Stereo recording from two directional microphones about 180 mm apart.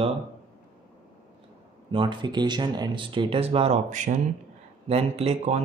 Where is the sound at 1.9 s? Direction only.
25° right (ahead or behind).